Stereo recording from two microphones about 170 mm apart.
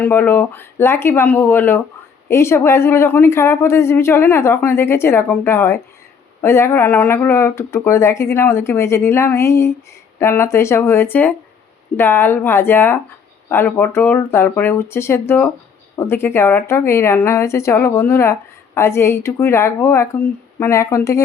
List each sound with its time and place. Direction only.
0.0 s a woman's voice: 10° left (ahead or behind)